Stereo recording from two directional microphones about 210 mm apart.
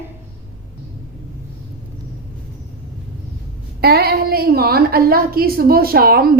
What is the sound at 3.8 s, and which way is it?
A woman's voice, 50° right (ahead or behind).